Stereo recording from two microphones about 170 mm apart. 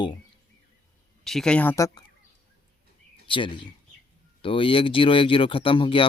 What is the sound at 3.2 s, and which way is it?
Bird, 30° left (ahead or behind).